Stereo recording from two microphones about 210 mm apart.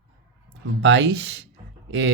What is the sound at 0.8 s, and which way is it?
Speech, 60° right (ahead or behind).